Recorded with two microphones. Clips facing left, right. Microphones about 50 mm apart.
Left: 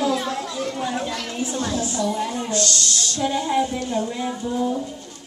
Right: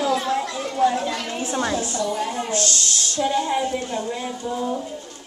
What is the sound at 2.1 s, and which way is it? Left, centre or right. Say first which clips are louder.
Speech: even; centre.